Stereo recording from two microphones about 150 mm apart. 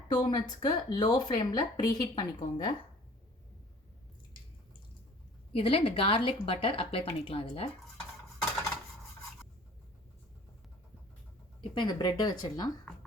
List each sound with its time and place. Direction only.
0.1 s a woman's voice: 30° left (ahead or behind)
5.5 s speech: 40° left (ahead or behind)
11.7 s a woman's voice: 30° left (ahead or behind)